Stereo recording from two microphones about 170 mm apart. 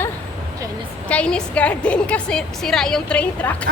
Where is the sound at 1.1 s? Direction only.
5° left (ahead or behind).